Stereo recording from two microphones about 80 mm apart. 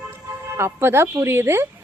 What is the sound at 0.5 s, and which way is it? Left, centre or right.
Speech, right.